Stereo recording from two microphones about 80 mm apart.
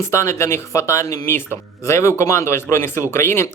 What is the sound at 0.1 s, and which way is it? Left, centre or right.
A man's voice, left.